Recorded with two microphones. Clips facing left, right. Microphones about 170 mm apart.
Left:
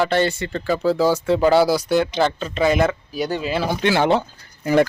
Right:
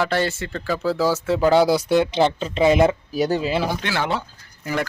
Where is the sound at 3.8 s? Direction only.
20° left (ahead or behind).